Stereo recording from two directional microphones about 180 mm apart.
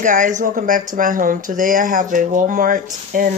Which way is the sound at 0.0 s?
45° right (ahead or behind).